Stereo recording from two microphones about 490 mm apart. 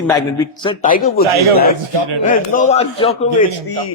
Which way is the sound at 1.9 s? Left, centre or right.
Right.